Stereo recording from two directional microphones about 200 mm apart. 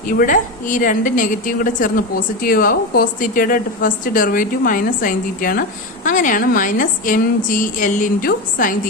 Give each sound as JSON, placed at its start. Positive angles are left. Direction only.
{"t": 0.2, "sound": "a woman's voice", "side_deg": 40}